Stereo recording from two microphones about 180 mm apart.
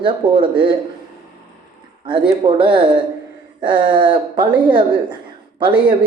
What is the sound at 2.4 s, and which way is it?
A woman's voice, 30° right (ahead or behind).